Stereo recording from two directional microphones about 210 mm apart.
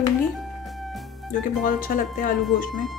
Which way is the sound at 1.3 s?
40° left (ahead or behind).